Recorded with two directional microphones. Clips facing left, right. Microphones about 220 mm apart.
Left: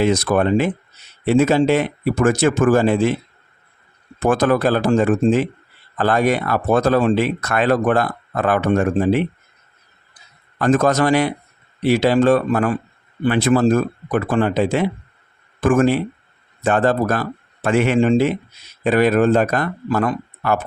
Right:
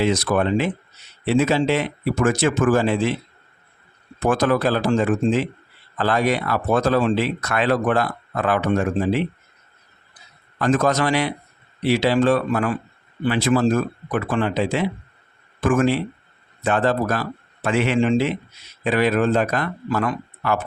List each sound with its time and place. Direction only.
0.0 s speech: 50° left (ahead or behind)
4.2 s speech: 50° left (ahead or behind)
10.6 s speech: 45° left (ahead or behind)